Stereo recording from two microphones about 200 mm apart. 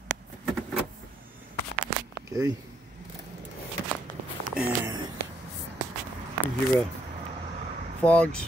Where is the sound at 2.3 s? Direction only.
15° right (ahead or behind).